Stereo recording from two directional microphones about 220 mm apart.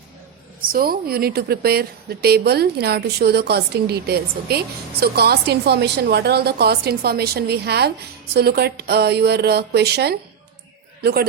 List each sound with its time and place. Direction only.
0.6 s a woman's voice: 40° right (ahead or behind)